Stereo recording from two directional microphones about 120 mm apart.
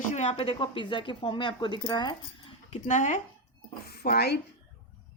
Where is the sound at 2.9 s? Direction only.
85° left.